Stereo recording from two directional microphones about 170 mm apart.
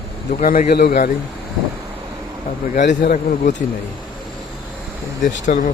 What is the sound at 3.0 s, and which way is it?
Speech, 50° left (ahead or behind).